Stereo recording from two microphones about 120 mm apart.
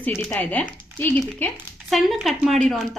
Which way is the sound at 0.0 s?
15° left (ahead or behind).